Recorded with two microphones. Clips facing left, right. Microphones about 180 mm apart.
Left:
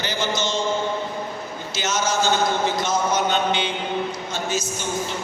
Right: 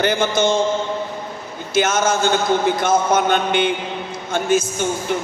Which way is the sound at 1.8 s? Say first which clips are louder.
Right 6 dB; 55° right (ahead or behind).